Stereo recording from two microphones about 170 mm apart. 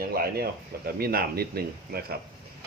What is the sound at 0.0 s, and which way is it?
Speech, 60° right (ahead or behind).